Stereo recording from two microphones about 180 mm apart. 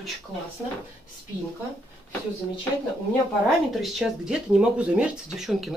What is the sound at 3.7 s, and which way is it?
Speech, centre (ahead or behind).